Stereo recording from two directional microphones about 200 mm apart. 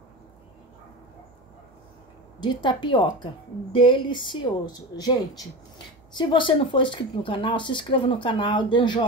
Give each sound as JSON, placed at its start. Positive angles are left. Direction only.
{"t": 2.6, "sound": "speech", "side_deg": 25}